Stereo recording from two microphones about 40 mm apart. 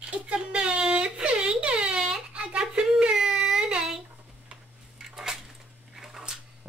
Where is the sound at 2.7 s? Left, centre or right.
Centre.